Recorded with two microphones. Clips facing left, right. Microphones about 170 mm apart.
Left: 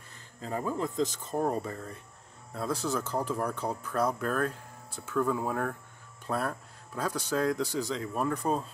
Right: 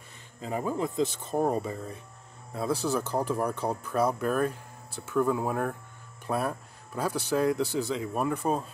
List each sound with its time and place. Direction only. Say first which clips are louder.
0.4 s speech: right 2 dB; 10° right (ahead or behind)
7.6 s speech: right 3 dB; 25° right (ahead or behind)
7.9 s speech: right 2 dB; 10° right (ahead or behind)